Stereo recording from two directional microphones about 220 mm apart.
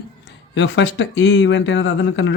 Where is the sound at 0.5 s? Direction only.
55° left (ahead or behind).